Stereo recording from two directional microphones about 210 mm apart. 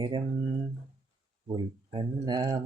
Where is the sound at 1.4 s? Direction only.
20° right (ahead or behind).